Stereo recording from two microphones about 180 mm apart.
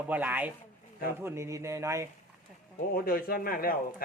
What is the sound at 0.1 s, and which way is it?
Speech, 10° right (ahead or behind).